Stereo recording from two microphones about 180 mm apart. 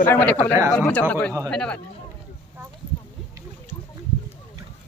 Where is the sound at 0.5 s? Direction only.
15° right (ahead or behind).